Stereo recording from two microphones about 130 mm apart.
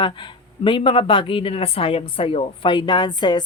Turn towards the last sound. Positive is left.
turn(degrees=35)  # may be behind; listen again after turning